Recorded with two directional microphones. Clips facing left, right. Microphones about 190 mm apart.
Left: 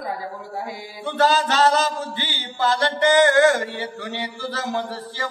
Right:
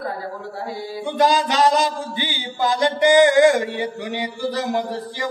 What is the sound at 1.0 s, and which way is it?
Mantra, 15° right (ahead or behind).